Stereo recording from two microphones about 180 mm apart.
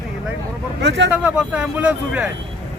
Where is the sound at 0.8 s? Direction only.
75° right (ahead or behind).